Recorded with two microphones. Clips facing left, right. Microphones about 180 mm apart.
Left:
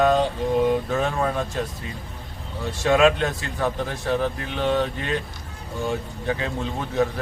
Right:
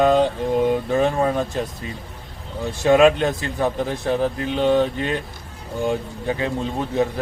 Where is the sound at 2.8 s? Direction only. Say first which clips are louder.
Right 4 dB; 20° right (ahead or behind).